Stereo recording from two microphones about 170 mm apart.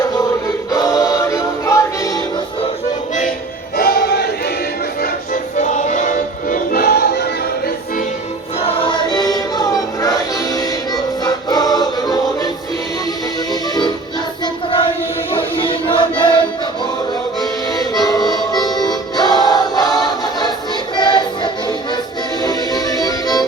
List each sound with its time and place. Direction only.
0.0 s music: 20° left (ahead or behind)
3.8 s choir: 65° left (ahead or behind)
4.9 s music: 60° left (ahead or behind)
5.5 s music: 45° left (ahead or behind); by 7.3 s 70° left (ahead or behind)
8.8 s choir: 25° left (ahead or behind)
10.5 s music: 25° left (ahead or behind)
13.5 s music: 25° left (ahead or behind)
14.4 s choir: 30° left (ahead or behind)
15.3 s music: 30° left (ahead or behind)
17.4 s music: 20° left (ahead or behind)
18.0 s harmonica: 25° left (ahead or behind)
18.7 s music: 25° left (ahead or behind)